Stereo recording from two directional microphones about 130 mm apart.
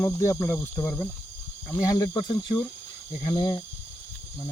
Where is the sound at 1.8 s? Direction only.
25° left (ahead or behind).